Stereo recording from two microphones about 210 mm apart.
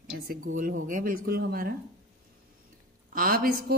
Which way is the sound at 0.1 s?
45° right (ahead or behind).